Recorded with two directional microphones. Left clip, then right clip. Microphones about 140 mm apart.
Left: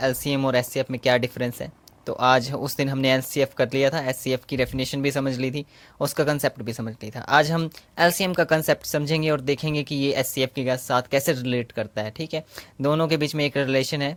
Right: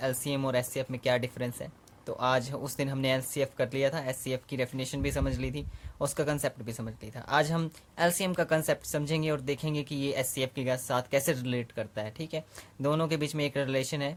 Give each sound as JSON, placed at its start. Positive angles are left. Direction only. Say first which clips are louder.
{"t": 0.0, "sound": "speech", "louder": "left 8 dB", "side_deg": 40}